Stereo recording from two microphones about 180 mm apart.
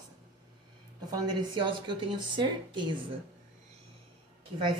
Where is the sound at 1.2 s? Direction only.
25° right (ahead or behind).